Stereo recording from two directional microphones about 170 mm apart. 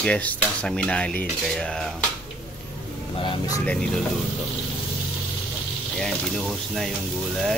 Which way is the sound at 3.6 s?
5° left (ahead or behind).